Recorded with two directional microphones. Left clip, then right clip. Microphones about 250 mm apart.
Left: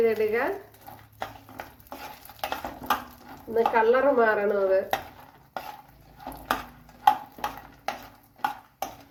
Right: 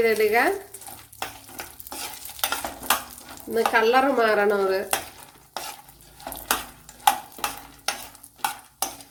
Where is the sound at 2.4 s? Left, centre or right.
Centre.